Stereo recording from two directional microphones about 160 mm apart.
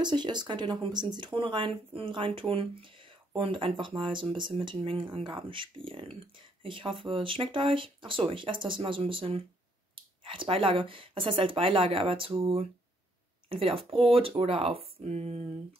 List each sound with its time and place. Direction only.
0.0 s speech: 30° right (ahead or behind)